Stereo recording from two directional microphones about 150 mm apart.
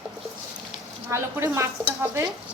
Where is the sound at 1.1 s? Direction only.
15° right (ahead or behind).